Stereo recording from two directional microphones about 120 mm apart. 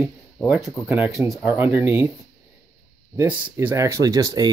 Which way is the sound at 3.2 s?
20° right (ahead or behind).